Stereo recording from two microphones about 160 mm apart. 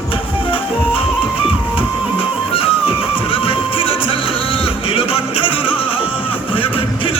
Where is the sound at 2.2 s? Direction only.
35° left (ahead or behind).